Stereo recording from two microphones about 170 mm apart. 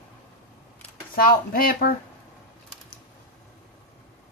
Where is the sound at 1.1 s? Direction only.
60° left (ahead or behind).